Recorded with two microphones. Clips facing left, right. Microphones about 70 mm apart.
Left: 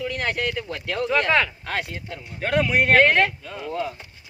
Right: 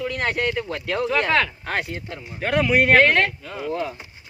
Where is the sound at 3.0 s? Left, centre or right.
Centre.